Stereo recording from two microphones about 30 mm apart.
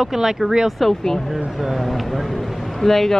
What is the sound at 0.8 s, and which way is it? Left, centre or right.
Speech, centre.